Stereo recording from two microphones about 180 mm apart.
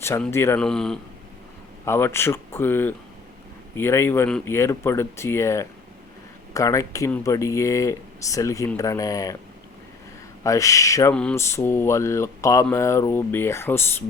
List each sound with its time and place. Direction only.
0.0 s speech: 15° left (ahead or behind)
1.8 s speech: 15° left (ahead or behind)
10.4 s speech: 20° left (ahead or behind)
11.1 s speech: 5° left (ahead or behind)